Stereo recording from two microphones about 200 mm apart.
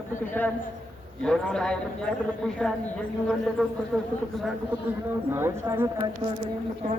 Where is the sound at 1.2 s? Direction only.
5° left (ahead or behind).